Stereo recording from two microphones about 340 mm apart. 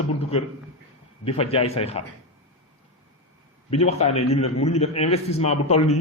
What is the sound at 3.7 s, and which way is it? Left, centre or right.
A man's voice, centre.